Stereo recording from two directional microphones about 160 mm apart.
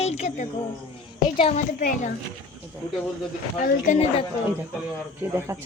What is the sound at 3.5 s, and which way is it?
Speech, 55° left (ahead or behind).